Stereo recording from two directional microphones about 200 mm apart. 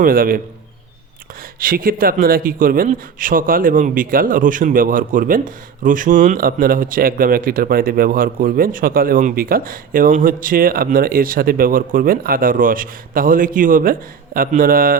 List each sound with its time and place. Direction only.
0.0 s speech: 45° right (ahead or behind)
1.5 s speech: 45° right (ahead or behind)